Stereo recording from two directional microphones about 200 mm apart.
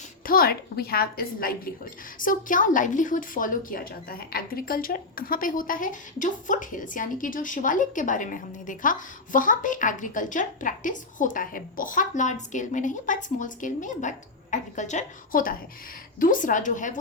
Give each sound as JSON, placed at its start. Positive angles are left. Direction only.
{"t": 0.3, "sound": "a woman's voice", "side_deg": 50}